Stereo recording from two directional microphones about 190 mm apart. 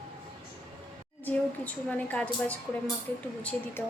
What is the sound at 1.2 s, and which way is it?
A child's voice, 10° left (ahead or behind).